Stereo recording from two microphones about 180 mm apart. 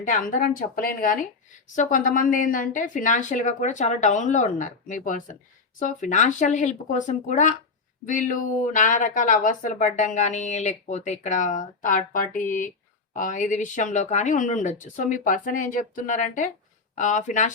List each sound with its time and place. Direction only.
0.0 s a woman's voice: 45° left (ahead or behind)